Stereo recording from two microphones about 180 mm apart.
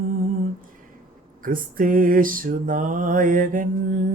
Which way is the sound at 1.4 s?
50° right (ahead or behind).